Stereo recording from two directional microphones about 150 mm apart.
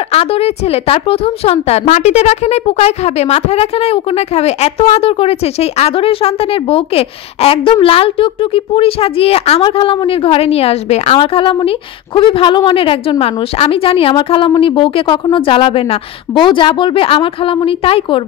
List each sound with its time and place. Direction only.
0.1 s a woman's voice: 40° left (ahead or behind)